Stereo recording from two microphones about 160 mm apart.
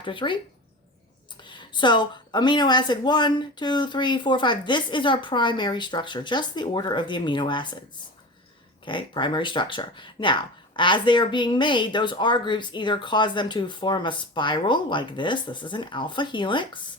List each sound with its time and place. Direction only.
0.0 s speech: 30° left (ahead or behind)
1.4 s speech: 30° left (ahead or behind)
8.8 s speech: 30° left (ahead or behind)